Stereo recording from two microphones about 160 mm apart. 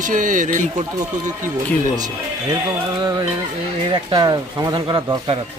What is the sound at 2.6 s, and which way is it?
Speech, 25° right (ahead or behind).